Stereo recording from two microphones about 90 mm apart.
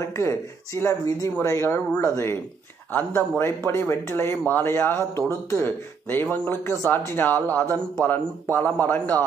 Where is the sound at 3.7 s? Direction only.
30° left (ahead or behind).